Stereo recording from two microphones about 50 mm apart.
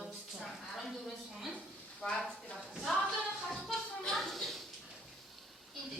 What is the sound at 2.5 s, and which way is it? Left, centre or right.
Speech, centre.